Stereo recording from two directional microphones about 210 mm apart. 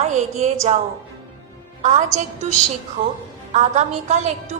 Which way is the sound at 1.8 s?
35° right (ahead or behind).